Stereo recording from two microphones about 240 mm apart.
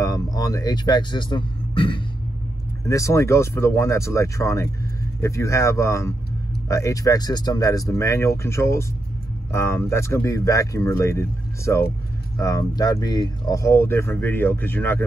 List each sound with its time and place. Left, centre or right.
0.0 s speech: centre